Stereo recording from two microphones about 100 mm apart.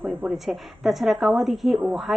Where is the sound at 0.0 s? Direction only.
15° right (ahead or behind).